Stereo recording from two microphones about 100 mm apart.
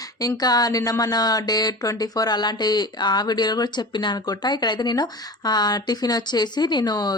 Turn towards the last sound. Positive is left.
turn(degrees=45)  # may be behind; listen again after turning